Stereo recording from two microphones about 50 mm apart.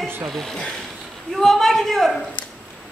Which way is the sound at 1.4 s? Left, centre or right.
Centre.